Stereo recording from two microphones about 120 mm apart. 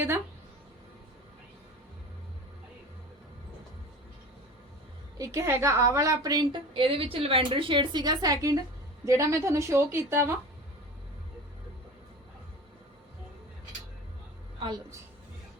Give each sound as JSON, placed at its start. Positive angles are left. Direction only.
{"t": 5.1, "sound": "a woman's voice", "side_deg": -25}